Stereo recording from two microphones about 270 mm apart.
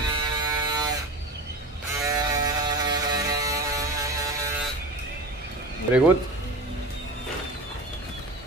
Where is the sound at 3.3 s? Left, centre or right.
Centre.